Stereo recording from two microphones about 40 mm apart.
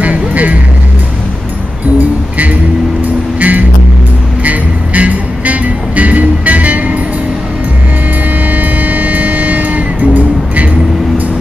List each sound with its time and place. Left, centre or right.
0.0 s music: right
2.0 s music: right
8.5 s music: right